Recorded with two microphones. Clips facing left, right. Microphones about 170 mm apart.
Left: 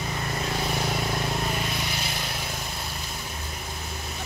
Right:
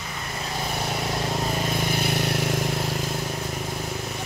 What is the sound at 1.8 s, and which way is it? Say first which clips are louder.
Vehicle: right 7 dB; 50° right (ahead or behind).